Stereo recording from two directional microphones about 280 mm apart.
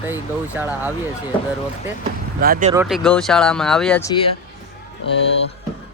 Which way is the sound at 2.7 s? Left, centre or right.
Centre.